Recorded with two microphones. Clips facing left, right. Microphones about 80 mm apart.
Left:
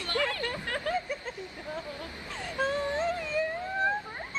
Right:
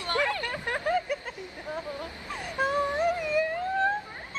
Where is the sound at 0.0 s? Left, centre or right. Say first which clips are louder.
Right 3 dB; right.